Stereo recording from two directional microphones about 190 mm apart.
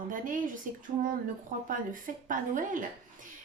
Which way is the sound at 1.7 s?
45° right (ahead or behind).